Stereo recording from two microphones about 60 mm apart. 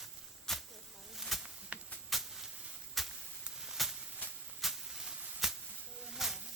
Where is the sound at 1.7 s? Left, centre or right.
Right.